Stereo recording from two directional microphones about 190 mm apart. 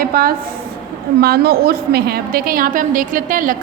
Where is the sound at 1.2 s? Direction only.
55° right (ahead or behind).